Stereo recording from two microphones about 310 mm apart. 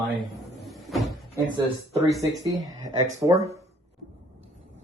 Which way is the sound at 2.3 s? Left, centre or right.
Centre.